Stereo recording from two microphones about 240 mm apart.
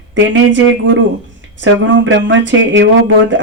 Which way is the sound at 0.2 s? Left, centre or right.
Right.